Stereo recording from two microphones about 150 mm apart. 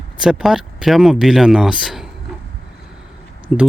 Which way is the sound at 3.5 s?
5° right (ahead or behind).